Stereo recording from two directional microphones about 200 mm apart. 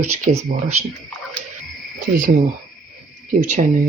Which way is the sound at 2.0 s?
40° right (ahead or behind).